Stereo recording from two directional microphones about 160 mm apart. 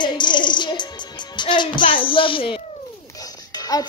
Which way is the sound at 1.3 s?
30° left (ahead or behind).